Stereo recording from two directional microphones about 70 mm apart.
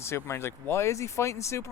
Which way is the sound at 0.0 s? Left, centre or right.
Left.